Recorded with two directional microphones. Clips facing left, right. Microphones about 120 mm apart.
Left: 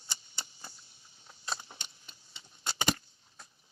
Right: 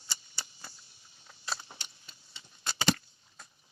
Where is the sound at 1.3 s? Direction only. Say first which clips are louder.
Even; 20° left (ahead or behind).